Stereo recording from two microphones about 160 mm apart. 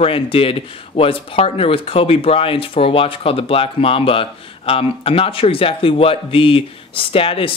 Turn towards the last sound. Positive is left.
turn(degrees=35)  # may be behind; listen again after turning